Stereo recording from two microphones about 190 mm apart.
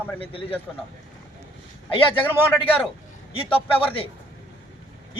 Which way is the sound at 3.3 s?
30° left (ahead or behind).